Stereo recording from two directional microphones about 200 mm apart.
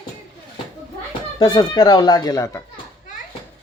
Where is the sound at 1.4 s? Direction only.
20° left (ahead or behind).